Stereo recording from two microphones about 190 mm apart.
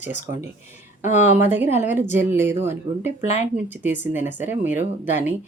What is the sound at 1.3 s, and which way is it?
Speech, 10° right (ahead or behind).